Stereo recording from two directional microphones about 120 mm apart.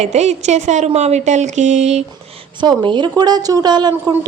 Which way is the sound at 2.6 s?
40° right (ahead or behind).